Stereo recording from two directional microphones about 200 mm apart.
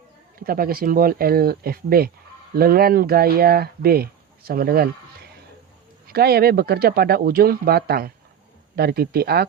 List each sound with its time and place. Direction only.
0.3 s speech: 45° right (ahead or behind)